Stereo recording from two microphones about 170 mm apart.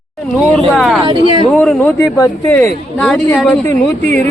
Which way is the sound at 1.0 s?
30° right (ahead or behind).